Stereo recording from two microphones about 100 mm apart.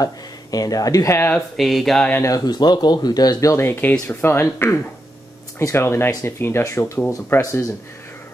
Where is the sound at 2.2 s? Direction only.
35° left (ahead or behind).